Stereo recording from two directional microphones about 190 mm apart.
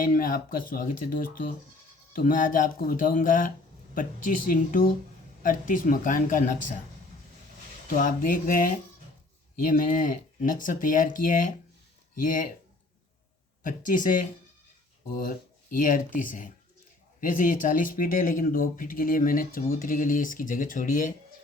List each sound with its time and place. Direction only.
0.0 s speech: 50° left (ahead or behind)
7.9 s speech: 45° left (ahead or behind)
13.6 s speech: 45° left (ahead or behind)